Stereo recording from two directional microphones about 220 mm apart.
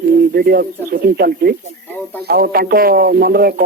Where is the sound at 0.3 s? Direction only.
45° right (ahead or behind).